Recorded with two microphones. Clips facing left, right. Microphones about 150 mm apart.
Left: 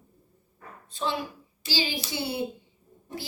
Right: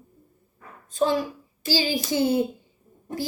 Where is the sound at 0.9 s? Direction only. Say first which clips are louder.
Right 8 dB; 45° right (ahead or behind).